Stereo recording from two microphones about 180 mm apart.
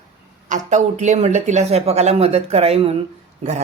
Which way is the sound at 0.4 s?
45° right (ahead or behind).